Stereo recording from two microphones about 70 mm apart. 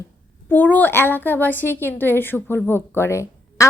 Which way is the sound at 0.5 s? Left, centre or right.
Left.